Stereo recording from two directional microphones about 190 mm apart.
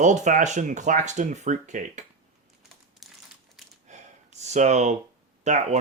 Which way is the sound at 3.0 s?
Centre (ahead or behind).